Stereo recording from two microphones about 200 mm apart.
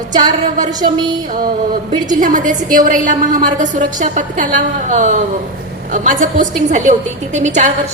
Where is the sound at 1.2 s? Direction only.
45° right (ahead or behind).